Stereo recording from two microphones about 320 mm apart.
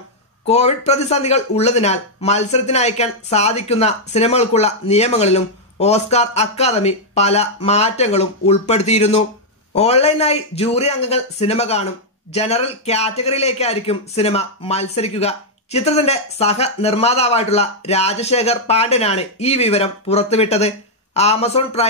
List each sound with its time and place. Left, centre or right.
0.5 s a man's voice: centre